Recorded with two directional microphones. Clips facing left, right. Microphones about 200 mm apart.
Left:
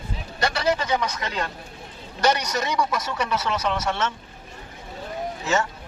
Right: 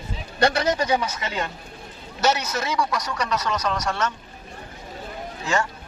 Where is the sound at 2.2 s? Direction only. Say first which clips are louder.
Left 1 dB; 5° right (ahead or behind).